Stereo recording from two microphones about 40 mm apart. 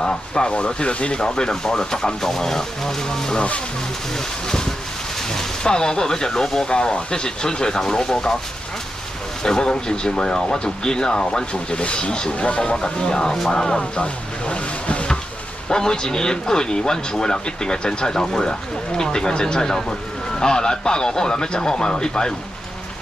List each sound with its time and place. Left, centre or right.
0.0 s speech: centre
4.5 s a sound: centre
5.3 s speech: centre
9.4 s speech: centre
12.7 s speech: centre
15.7 s speech: centre